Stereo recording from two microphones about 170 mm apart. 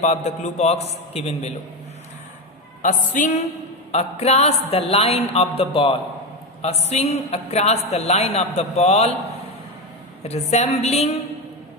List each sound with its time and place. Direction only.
0.0 s a man's voice: 40° left (ahead or behind)
2.8 s music: 50° left (ahead or behind)
3.9 s a man's voice: 40° left (ahead or behind)
10.5 s a man's voice: 40° left (ahead or behind)